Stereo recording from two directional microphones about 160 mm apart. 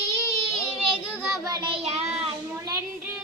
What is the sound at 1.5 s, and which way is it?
Child singing, 30° right (ahead or behind).